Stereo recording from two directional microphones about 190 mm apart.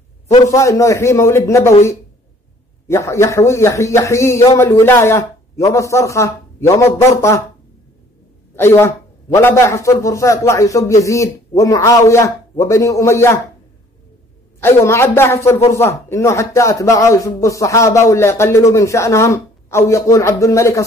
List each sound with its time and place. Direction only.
0.3 s a man's voice: 15° left (ahead or behind)
2.9 s a man's voice: 15° left (ahead or behind)
8.5 s a man's voice: 15° left (ahead or behind)
14.6 s a man's voice: 15° left (ahead or behind)